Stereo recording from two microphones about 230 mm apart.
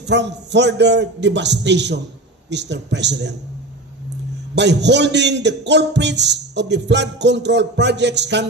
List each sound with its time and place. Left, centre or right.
0.0 s a man's voice: right
4.6 s a man's voice: right